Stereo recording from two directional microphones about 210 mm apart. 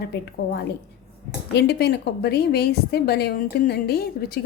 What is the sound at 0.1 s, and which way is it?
A woman's voice, 50° left (ahead or behind).